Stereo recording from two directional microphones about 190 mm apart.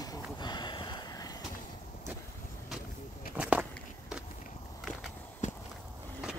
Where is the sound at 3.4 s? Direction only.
5° right (ahead or behind).